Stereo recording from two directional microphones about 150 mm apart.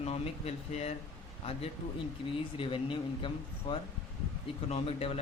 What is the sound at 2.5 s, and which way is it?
Speech, 35° left (ahead or behind).